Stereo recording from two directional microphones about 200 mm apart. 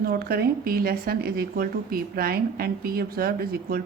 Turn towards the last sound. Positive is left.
turn(degrees=-50)  # may be behind; listen again after turning